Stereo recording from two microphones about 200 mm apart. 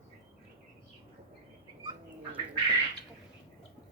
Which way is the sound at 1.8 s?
25° right (ahead or behind).